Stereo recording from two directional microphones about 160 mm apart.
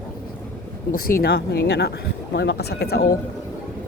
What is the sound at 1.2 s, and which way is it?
Speech, 75° left (ahead or behind).